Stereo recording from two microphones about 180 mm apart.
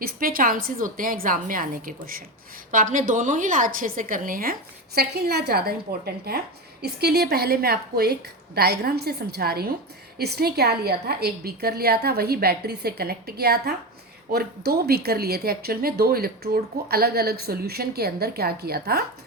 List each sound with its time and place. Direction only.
0.0 s a woman's voice: 55° right (ahead or behind)
4.9 s speech: 60° right (ahead or behind)